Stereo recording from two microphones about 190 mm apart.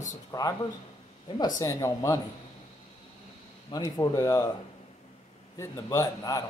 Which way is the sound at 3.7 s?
20° left (ahead or behind).